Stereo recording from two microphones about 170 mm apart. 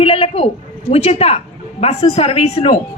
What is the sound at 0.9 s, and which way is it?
A man's voice, 35° left (ahead or behind).